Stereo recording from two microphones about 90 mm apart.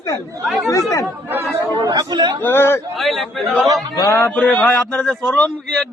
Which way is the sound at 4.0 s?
30° left (ahead or behind).